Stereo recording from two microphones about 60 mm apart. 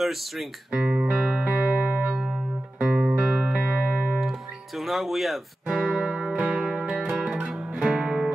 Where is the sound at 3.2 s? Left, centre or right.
Right.